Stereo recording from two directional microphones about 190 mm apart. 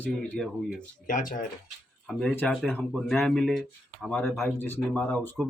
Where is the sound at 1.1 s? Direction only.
45° left (ahead or behind).